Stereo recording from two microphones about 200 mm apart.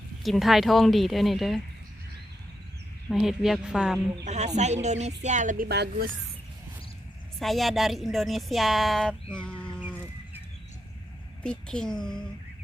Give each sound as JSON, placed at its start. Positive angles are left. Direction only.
{"t": 0.2, "sound": "a woman's voice", "side_deg": 0}
{"t": 3.1, "sound": "a woman's voice", "side_deg": 0}
{"t": 4.3, "sound": "speech", "side_deg": -35}
{"t": 7.3, "sound": "a woman's voice", "side_deg": 0}
{"t": 9.4, "sound": "a sound", "side_deg": 5}
{"t": 11.4, "sound": "a woman's voice", "side_deg": 5}